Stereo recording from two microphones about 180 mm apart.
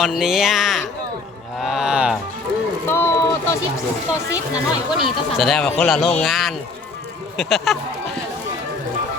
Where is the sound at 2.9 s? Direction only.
10° left (ahead or behind).